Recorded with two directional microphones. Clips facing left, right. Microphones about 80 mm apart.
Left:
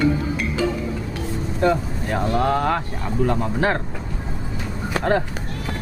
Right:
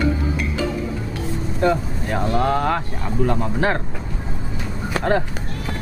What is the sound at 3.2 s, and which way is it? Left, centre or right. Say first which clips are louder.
Speech: even; right.